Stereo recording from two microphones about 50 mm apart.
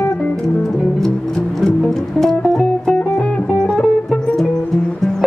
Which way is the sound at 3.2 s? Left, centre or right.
Left.